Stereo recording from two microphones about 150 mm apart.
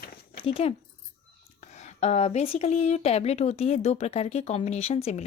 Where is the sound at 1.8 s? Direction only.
45° left (ahead or behind).